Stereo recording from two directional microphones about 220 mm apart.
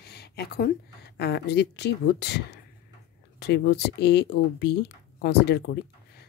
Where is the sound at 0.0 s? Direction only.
45° left (ahead or behind).